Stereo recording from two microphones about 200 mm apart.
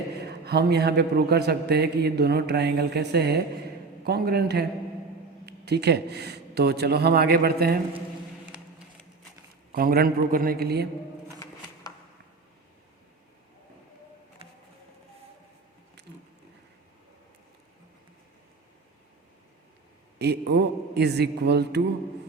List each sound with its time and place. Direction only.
0.3 s a man's voice: 55° right (ahead or behind)
9.7 s a man's voice: 50° right (ahead or behind)
16.0 s a sound: 55° right (ahead or behind)
20.1 s a man's voice: 55° right (ahead or behind)